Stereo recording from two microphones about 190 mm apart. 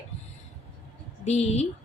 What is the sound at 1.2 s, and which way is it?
Speech, 35° left (ahead or behind).